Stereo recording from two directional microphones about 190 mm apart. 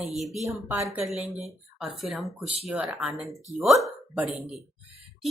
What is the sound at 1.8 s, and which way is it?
Speech, centre (ahead or behind).